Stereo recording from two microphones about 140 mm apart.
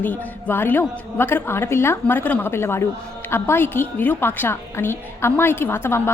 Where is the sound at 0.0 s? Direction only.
15° left (ahead or behind).